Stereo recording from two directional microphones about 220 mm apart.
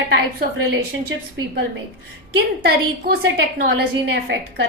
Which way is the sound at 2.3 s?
45° right (ahead or behind).